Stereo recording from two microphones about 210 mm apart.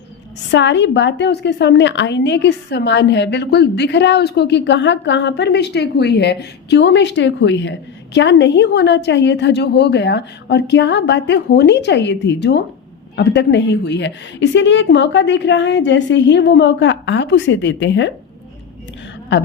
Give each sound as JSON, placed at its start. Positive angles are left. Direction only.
{"t": 0.5, "sound": "a woman's voice", "side_deg": 60}